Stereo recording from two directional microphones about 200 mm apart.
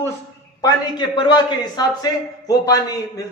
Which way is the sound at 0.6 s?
20° left (ahead or behind).